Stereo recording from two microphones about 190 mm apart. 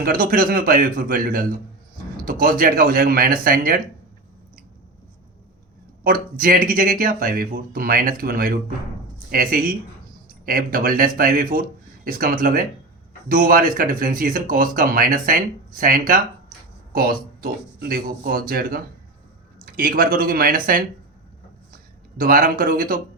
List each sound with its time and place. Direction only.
0.0 s speech: 45° right (ahead or behind)
6.0 s speech: 45° right (ahead or behind)
22.2 s speech: 50° right (ahead or behind)